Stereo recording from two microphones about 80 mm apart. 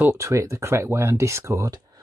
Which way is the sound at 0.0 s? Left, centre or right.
Right.